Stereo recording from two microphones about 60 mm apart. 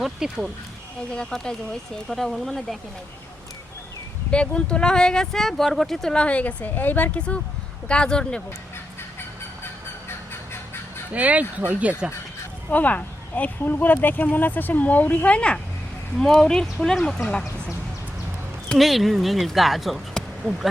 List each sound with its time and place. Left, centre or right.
0.0 s speech: centre
1.1 s speech: centre
4.3 s speech: centre
6.2 s speech: left
11.1 s speech: right
12.7 s speech: left
16.1 s speech: centre
18.8 s speech: centre